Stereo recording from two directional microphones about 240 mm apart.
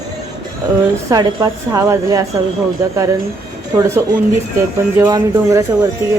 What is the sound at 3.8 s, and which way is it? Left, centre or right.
A woman's voice, centre.